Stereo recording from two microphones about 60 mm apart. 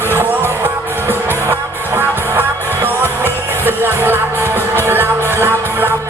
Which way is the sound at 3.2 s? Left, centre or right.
Right.